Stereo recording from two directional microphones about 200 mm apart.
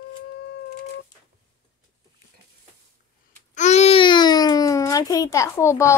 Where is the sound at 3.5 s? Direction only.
35° left (ahead or behind).